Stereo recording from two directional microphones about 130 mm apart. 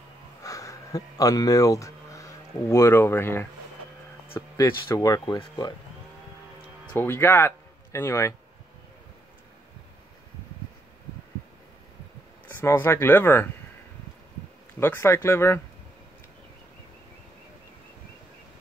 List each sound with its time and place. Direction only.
0.4 s speech: 25° left (ahead or behind)
6.9 s speech: 15° left (ahead or behind)
12.4 s speech: 15° left (ahead or behind)
14.8 s speech: 20° left (ahead or behind)